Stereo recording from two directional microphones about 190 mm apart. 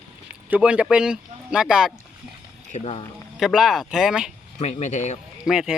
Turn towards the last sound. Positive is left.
turn(degrees=-5)  # may be behind; listen again after turning